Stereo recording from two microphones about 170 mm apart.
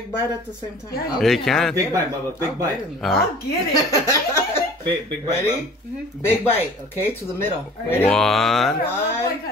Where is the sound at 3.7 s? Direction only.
20° left (ahead or behind).